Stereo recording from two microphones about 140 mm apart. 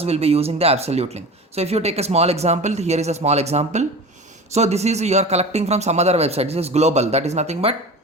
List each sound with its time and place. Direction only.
0.0 s speech: 45° right (ahead or behind)